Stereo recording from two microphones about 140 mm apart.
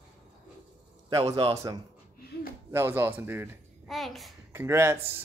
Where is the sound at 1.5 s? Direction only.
25° right (ahead or behind).